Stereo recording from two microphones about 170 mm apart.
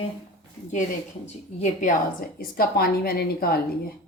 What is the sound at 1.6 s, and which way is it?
A woman's voice, 50° left (ahead or behind).